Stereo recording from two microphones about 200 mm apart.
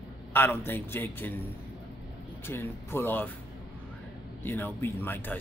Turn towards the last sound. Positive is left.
turn(degrees=10)  # may be behind; listen again after turning